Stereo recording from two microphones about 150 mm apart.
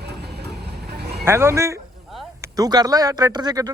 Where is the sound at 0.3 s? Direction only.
90° right.